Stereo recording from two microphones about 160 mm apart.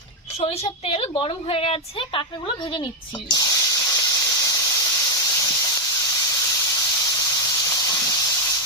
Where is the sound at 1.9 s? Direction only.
35° left (ahead or behind).